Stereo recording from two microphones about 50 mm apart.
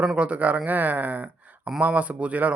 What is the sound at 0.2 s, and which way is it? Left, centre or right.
Speech, right.